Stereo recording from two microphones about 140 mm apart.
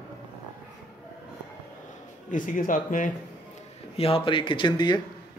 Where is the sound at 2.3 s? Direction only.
70° left (ahead or behind).